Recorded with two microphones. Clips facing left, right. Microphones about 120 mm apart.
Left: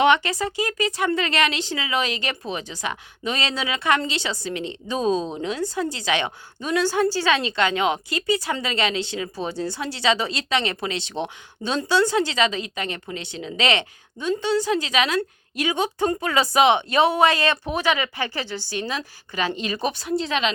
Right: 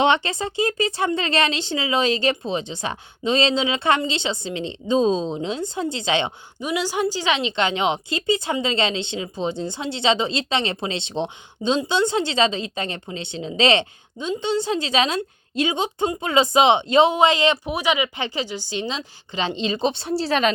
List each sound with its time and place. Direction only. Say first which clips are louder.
0.0 s a woman's voice: left 1 dB; 25° right (ahead or behind)
6.6 s a woman's voice: left 2 dB; 15° right (ahead or behind); by 20.5 s 40° right (ahead or behind)